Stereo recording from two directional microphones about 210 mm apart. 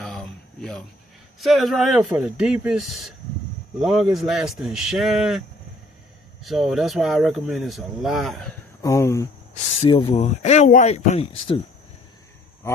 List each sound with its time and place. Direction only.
0.0 s a sound: 5° left (ahead or behind)
1.4 s speech: centre (ahead or behind)
6.4 s speech: centre (ahead or behind)
8.8 s speech: 15° left (ahead or behind)
9.5 s speech: 25° left (ahead or behind)